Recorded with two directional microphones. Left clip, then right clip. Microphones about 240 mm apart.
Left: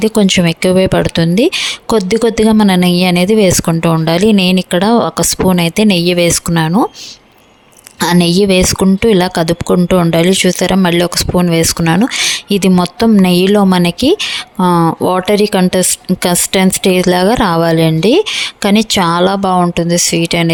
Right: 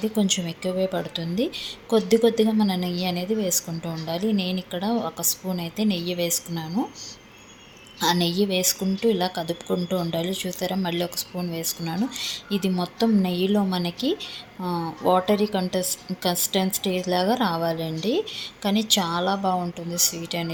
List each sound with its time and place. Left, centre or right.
0.0 s speech: left
8.0 s speech: left